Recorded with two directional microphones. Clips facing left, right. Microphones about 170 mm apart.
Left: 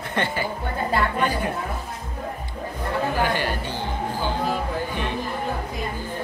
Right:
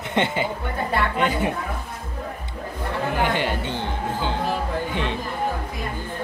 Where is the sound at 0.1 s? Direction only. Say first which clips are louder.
Right 3 dB; 20° right (ahead or behind).